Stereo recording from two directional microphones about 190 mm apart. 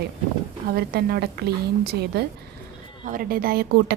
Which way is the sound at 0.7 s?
55° right (ahead or behind).